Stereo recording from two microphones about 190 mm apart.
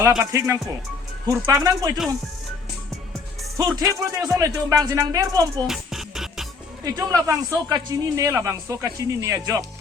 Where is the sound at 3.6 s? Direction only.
20° right (ahead or behind).